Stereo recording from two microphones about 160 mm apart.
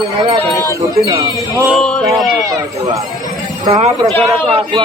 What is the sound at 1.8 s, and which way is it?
Speech, 5° left (ahead or behind).